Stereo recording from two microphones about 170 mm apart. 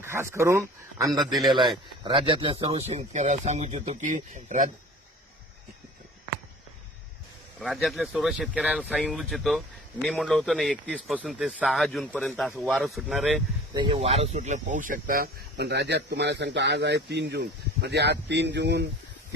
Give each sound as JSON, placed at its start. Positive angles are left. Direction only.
{"t": 0.0, "sound": "speech", "side_deg": -15}
{"t": 1.3, "sound": "speech", "side_deg": 0}
{"t": 2.0, "sound": "speech", "side_deg": -30}
{"t": 7.6, "sound": "speech", "side_deg": 0}
{"t": 13.7, "sound": "speech", "side_deg": -35}